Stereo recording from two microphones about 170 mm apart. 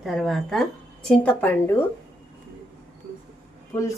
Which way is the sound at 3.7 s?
20° left (ahead or behind).